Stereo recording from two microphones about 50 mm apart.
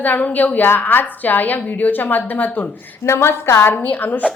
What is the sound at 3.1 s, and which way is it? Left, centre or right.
Speech, left.